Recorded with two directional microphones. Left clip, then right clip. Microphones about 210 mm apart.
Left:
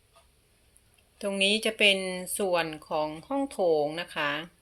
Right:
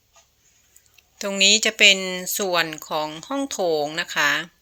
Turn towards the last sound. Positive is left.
turn(degrees=-20)  # may be behind; listen again after turning